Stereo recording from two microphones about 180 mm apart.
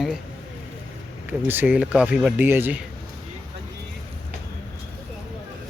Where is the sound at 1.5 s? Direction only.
10° right (ahead or behind).